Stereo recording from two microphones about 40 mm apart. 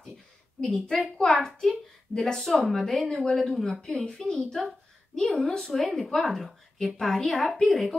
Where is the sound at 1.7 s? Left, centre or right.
Centre.